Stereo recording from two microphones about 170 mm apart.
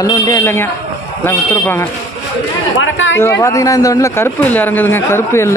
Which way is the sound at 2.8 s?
90° left.